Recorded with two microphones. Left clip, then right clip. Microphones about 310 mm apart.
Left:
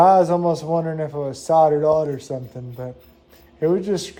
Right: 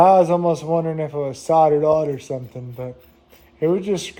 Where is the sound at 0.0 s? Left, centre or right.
Right.